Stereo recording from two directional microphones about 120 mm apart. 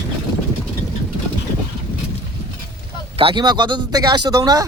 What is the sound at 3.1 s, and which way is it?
Speech, 50° right (ahead or behind).